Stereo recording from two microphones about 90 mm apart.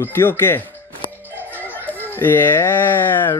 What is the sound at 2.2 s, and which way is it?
Speech, 20° left (ahead or behind).